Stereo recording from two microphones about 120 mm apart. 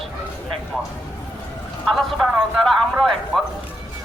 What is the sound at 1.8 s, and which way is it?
Speech, centre (ahead or behind).